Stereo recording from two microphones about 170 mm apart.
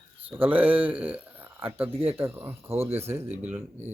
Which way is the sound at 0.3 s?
10° right (ahead or behind).